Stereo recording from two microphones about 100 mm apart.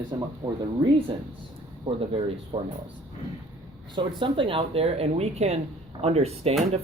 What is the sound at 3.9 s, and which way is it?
Speech, 55° right (ahead or behind).